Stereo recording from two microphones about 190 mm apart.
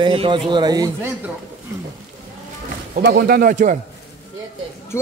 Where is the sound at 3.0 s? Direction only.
60° right (ahead or behind).